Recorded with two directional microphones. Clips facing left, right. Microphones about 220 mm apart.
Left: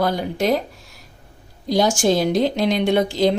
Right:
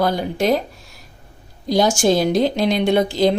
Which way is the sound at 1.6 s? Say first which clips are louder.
Right 1 dB; 40° right (ahead or behind).